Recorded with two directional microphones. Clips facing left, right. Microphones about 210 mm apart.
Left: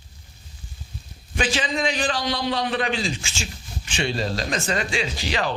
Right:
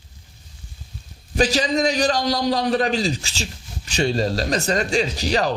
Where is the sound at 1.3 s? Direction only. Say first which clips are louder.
Right 6 dB; 40° right (ahead or behind).